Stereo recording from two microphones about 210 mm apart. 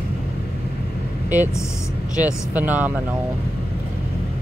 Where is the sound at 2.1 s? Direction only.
5° right (ahead or behind).